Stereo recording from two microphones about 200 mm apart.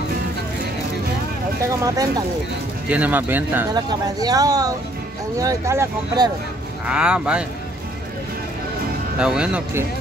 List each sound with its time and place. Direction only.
1.7 s speech: 15° right (ahead or behind)
6.9 s speech: 5° right (ahead or behind)
9.2 s speech: 5° right (ahead or behind)